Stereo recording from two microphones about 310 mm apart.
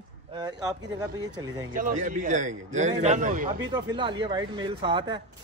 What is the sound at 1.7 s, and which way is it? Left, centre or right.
A man's voice, right.